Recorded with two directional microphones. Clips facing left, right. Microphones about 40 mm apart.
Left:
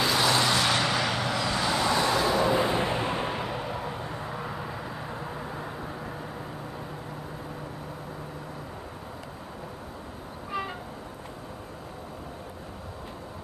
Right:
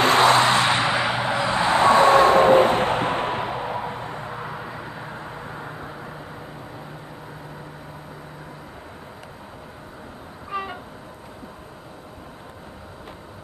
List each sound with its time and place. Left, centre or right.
0.0 s vehicle: right; by 6.1 s centre
10.5 s train: centre